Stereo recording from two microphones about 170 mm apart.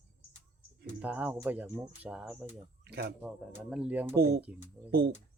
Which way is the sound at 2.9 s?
70° right (ahead or behind).